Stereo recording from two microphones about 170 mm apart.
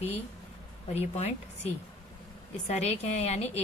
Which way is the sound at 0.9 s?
40° left (ahead or behind).